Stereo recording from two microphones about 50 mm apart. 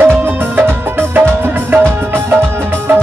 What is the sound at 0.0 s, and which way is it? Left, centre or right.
Music, right.